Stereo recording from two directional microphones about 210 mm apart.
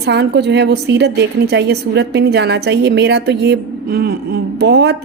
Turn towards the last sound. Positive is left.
turn(degrees=-50)  # may be behind; listen again after turning